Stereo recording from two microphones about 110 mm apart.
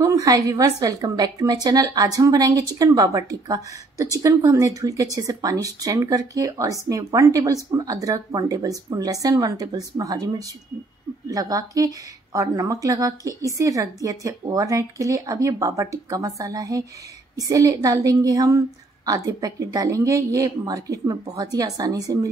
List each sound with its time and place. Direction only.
0.0 s a woman's voice: 30° right (ahead or behind)